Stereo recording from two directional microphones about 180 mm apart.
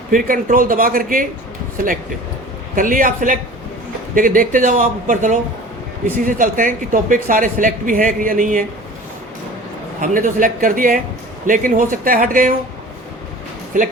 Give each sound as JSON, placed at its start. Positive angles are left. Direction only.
{"t": 0.1, "sound": "speech", "side_deg": -50}
{"t": 2.7, "sound": "speech", "side_deg": -50}
{"t": 10.0, "sound": "speech", "side_deg": -50}
{"t": 13.7, "sound": "speech", "side_deg": -45}